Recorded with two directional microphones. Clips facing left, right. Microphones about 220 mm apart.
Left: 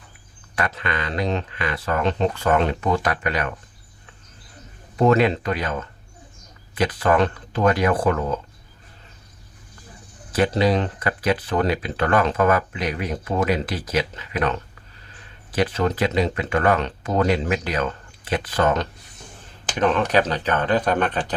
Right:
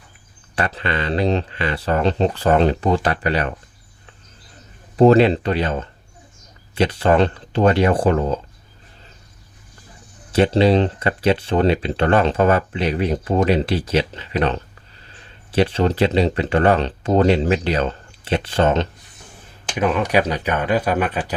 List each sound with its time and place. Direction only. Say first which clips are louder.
0.5 s speech: right 3 dB; 30° right (ahead or behind)
4.9 s speech: right 5 dB; 30° right (ahead or behind)
10.3 s speech: right 5 dB; 25° right (ahead or behind)
19.7 s speech: right 1 dB; 10° right (ahead or behind)